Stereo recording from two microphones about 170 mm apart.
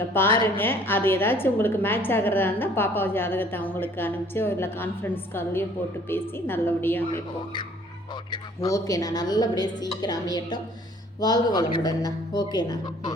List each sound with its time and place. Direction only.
0.0 s a woman's voice: 15° left (ahead or behind)
8.3 s a woman's voice: 20° left (ahead or behind)